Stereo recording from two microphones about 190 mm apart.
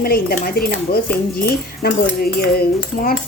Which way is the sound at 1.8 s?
50° left (ahead or behind).